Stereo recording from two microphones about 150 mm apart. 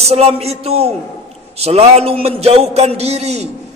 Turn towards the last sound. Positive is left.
turn(degrees=-45)  # may be behind; listen again after turning